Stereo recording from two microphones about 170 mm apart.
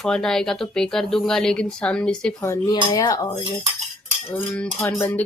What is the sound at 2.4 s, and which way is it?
Speech, 20° left (ahead or behind).